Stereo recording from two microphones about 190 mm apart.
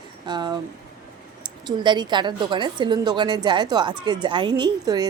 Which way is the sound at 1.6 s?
25° right (ahead or behind).